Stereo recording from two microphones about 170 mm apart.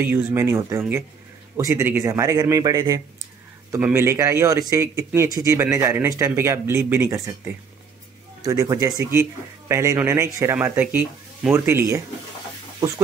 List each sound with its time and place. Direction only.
0.0 s a man's voice: 15° right (ahead or behind)
8.5 s a man's voice: 20° right (ahead or behind)